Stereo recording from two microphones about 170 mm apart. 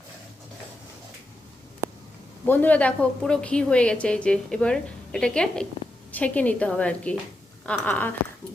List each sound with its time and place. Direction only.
2.5 s a woman's voice: 10° left (ahead or behind)